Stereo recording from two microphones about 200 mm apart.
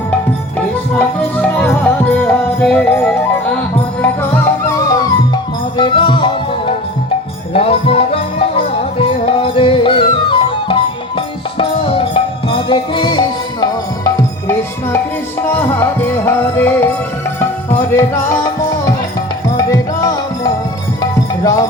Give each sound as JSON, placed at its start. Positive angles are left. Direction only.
{"t": 0.9, "sound": "music", "side_deg": 5}
{"t": 7.5, "sound": "music", "side_deg": 30}